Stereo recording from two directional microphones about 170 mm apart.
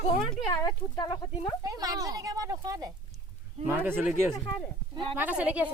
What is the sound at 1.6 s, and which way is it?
Speech, 20° right (ahead or behind).